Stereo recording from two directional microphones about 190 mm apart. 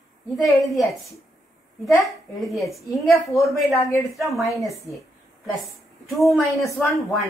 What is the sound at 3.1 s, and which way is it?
A man's voice, 15° left (ahead or behind).